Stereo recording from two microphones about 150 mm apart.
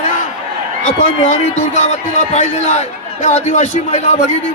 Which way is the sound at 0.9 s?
55° left (ahead or behind).